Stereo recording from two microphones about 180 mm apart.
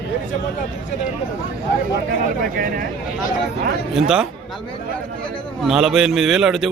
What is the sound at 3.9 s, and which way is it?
Speech, 5° right (ahead or behind).